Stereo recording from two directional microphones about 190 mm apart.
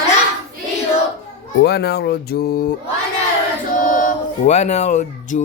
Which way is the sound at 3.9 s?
45° left (ahead or behind).